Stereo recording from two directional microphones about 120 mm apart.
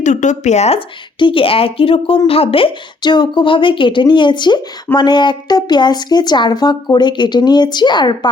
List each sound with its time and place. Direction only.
0.0 s a woman's voice: 90° left; by 8.3 s 40° left (ahead or behind)